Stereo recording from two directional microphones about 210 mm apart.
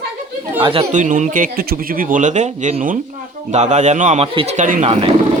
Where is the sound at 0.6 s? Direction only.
25° right (ahead or behind).